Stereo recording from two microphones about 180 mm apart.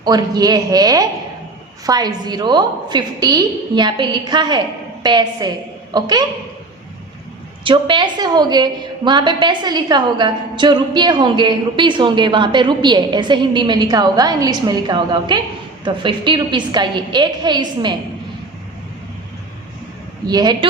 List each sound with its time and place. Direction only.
0.0 s a woman's voice: 20° right (ahead or behind)
7.6 s a woman's voice: 25° right (ahead or behind)
20.2 s a woman's voice: 20° right (ahead or behind)